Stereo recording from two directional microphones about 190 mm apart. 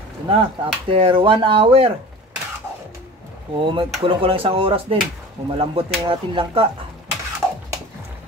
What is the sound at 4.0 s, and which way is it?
Speech, 30° right (ahead or behind).